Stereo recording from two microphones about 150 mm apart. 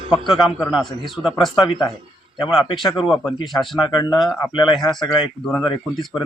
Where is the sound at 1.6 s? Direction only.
25° left (ahead or behind).